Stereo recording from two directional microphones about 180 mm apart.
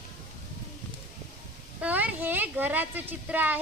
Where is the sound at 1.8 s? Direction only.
10° right (ahead or behind).